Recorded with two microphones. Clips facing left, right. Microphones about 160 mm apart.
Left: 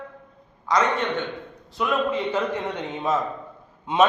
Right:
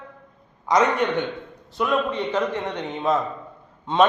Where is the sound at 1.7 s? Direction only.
Centre (ahead or behind).